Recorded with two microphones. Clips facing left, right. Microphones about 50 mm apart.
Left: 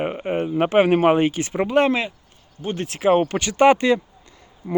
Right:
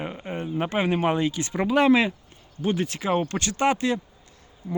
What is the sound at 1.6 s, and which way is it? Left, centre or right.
Speech, centre.